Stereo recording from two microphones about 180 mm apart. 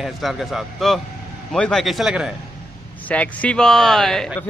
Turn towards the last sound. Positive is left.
turn(degrees=0)  # may be behind; listen again after turning